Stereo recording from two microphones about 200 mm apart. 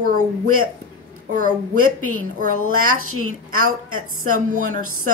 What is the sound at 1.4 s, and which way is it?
A woman's voice, 90° right.